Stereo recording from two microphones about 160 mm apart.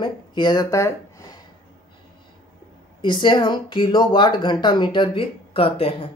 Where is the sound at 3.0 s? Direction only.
30° left (ahead or behind).